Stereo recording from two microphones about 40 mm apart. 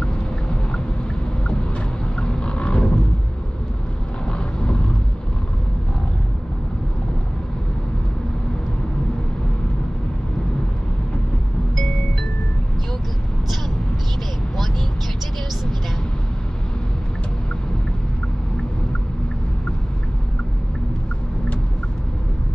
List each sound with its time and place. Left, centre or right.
2.1 s vehicle: left
4.3 s vehicle: left